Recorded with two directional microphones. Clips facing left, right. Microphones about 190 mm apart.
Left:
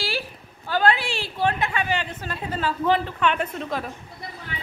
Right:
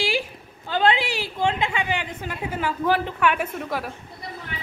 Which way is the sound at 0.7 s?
20° right (ahead or behind).